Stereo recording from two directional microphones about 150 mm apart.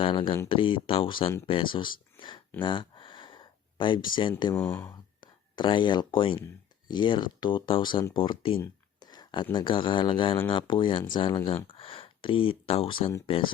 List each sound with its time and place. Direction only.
0.0 s speech: 35° left (ahead or behind)
2.6 s a sound: 35° left (ahead or behind)
4.1 s speech: 35° left (ahead or behind)
4.5 s speech: 15° left (ahead or behind)
4.9 s speech: 30° left (ahead or behind)